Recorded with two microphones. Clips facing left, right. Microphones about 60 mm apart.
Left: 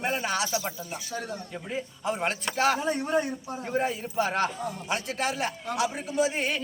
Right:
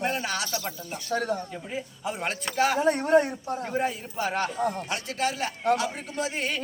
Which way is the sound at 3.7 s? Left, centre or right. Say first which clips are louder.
Left 3 dB; centre.